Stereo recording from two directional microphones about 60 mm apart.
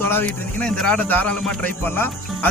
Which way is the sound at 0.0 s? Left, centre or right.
Left.